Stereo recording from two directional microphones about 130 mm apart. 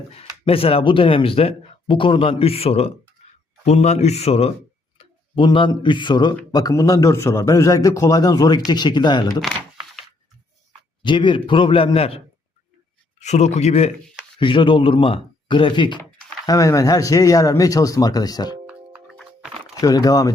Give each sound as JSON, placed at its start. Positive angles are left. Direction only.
{"t": 0.1, "sound": "a man's voice", "side_deg": 50}
{"t": 11.0, "sound": "speech", "side_deg": 40}
{"t": 13.1, "sound": "a man's voice", "side_deg": 60}
{"t": 14.3, "sound": "speech", "side_deg": 40}
{"t": 16.5, "sound": "speech", "side_deg": 25}
{"t": 18.6, "sound": "music", "side_deg": -10}
{"t": 19.2, "sound": "a sound", "side_deg": -5}
{"t": 19.8, "sound": "speech", "side_deg": 30}